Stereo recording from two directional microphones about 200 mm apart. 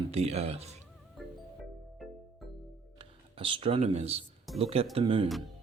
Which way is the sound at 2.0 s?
Centre (ahead or behind).